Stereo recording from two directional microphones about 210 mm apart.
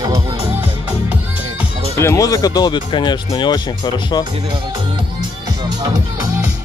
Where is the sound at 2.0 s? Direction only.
15° left (ahead or behind).